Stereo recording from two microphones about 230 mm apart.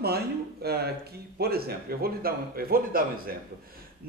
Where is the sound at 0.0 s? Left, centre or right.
Right.